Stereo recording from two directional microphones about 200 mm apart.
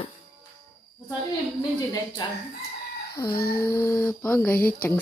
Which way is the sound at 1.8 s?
20° left (ahead or behind).